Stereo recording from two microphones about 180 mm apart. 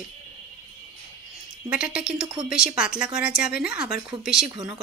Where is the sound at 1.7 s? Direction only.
5° right (ahead or behind).